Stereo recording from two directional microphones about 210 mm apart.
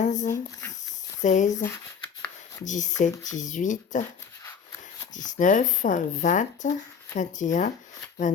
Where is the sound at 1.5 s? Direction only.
15° left (ahead or behind).